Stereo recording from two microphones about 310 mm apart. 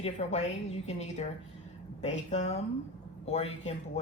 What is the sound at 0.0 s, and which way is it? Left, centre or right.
Speech, left.